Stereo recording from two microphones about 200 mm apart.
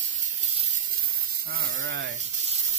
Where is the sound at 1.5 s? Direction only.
50° right (ahead or behind).